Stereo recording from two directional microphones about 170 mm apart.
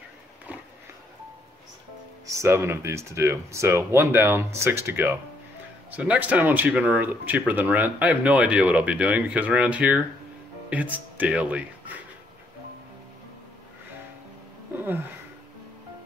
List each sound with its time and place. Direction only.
2.3 s speech: 15° right (ahead or behind)